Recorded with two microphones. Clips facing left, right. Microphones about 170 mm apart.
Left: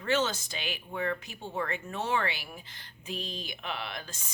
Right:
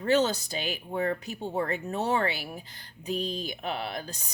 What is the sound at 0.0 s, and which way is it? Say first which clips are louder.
Speech: right 5 dB; 40° right (ahead or behind).